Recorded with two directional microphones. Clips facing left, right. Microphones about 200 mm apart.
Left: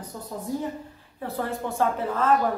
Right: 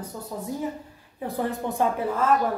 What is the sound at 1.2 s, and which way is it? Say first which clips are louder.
A woman's voice: right 2 dB; 15° right (ahead or behind).